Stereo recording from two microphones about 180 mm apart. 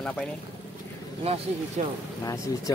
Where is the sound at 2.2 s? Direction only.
20° left (ahead or behind).